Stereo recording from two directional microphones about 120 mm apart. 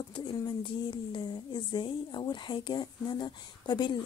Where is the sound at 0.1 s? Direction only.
45° left (ahead or behind).